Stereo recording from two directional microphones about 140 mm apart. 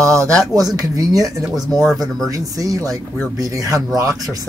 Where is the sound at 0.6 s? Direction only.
25° right (ahead or behind).